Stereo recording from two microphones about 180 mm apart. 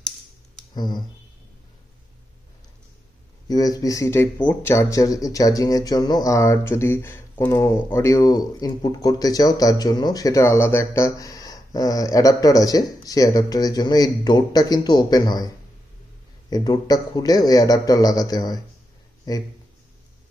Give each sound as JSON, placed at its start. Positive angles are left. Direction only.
{"t": 0.7, "sound": "speech", "side_deg": 25}
{"t": 3.4, "sound": "speech", "side_deg": 20}